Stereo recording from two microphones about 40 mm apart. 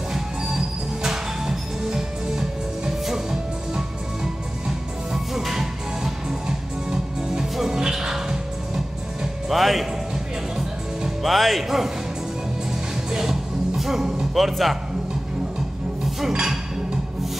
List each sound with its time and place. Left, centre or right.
0.1 s music: centre
9.5 s music: centre
11.2 s speech: centre
13.1 s music: centre
14.3 s speech: centre